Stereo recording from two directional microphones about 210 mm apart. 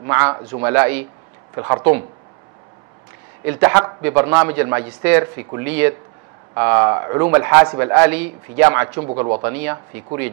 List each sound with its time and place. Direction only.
0.3 s a man's voice: 15° right (ahead or behind)
3.4 s a man's voice: 15° right (ahead or behind)
9.5 s a man's voice: 10° right (ahead or behind)